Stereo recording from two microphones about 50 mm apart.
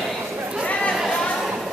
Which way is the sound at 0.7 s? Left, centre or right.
Left.